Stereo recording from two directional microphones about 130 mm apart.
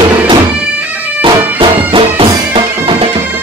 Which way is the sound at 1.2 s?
40° right (ahead or behind).